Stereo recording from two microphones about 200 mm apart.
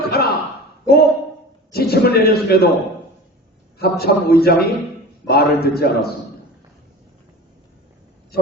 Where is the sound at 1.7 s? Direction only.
50° left (ahead or behind).